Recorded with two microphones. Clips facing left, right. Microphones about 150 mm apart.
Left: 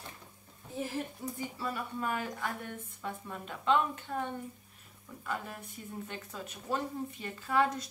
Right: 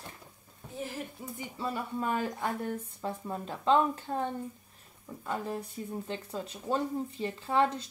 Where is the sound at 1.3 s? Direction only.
25° right (ahead or behind).